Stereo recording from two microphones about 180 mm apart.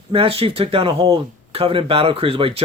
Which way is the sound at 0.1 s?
30° right (ahead or behind).